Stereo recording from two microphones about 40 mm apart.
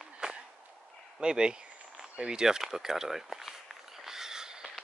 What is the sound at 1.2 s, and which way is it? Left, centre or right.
Speech, centre.